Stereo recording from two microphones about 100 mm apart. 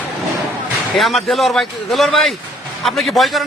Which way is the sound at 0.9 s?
Centre (ahead or behind).